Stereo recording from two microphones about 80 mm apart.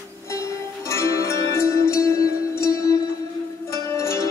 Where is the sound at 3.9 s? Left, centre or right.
Left.